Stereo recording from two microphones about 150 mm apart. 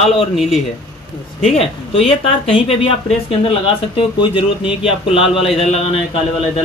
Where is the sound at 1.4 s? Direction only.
40° left (ahead or behind).